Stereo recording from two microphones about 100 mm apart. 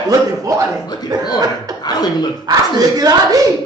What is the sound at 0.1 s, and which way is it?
Speech, 35° right (ahead or behind).